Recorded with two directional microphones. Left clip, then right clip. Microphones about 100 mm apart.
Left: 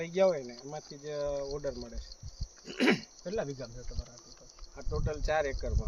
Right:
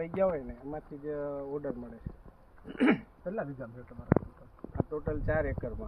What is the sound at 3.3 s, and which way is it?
Speech, 50° left (ahead or behind).